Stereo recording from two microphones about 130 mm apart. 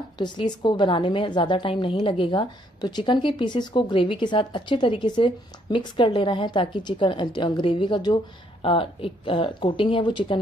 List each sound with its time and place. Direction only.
0.2 s speech: 35° left (ahead or behind)